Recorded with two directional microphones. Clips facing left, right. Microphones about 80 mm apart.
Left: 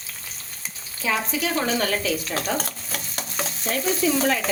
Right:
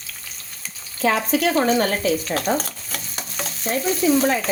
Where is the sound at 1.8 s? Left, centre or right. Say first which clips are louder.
Right 4 dB; right.